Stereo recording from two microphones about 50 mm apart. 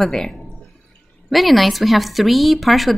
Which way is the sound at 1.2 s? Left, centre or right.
Centre.